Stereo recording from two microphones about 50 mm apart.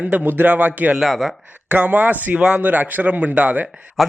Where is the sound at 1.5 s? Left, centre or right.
Right.